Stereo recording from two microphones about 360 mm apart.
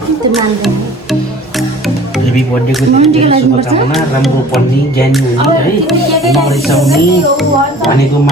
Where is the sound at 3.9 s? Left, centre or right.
Centre.